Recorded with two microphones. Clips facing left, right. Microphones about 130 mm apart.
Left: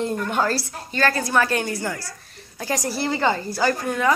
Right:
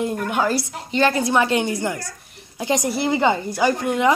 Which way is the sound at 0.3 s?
15° right (ahead or behind).